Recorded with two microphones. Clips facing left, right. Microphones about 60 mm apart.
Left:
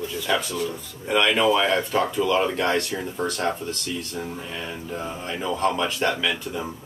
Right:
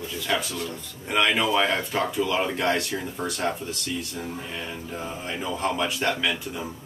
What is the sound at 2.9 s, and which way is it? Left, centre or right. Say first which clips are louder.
Speech: left 3 dB; centre.